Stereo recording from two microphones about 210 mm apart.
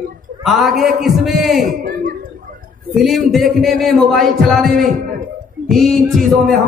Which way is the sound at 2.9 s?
Centre (ahead or behind).